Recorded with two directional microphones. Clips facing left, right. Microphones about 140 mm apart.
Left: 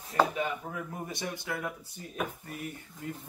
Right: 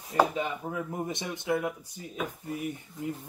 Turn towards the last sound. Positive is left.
turn(degrees=-15)  # may be behind; listen again after turning